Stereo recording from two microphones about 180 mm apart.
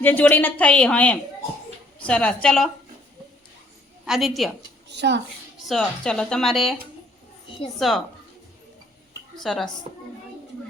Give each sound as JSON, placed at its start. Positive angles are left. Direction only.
{"t": 0.0, "sound": "a woman's voice", "side_deg": 10}
{"t": 4.0, "sound": "a woman's voice", "side_deg": 0}
{"t": 4.9, "sound": "a woman's voice", "side_deg": -70}
{"t": 5.6, "sound": "a woman's voice", "side_deg": 5}
{"t": 7.8, "sound": "a woman's voice", "side_deg": 0}
{"t": 9.3, "sound": "a woman's voice", "side_deg": 0}